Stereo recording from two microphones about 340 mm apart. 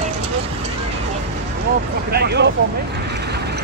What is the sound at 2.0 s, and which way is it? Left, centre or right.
Vehicle, right.